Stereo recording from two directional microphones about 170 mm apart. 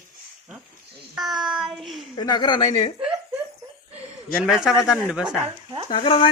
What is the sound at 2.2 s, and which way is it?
Speech, 25° left (ahead or behind).